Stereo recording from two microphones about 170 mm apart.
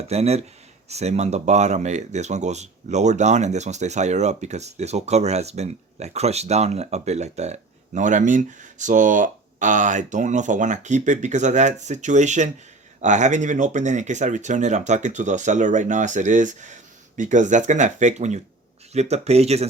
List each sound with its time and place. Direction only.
0.1 s speech: 40° right (ahead or behind)